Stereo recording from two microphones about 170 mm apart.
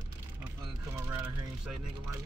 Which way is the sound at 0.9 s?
15° right (ahead or behind).